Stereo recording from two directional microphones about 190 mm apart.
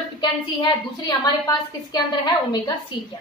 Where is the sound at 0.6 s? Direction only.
25° left (ahead or behind).